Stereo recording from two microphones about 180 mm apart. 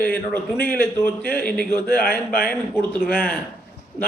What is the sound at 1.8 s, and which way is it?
Speech, 60° left (ahead or behind).